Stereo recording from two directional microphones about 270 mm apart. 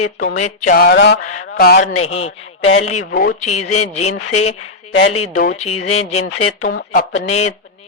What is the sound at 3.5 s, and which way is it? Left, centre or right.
Speech, left.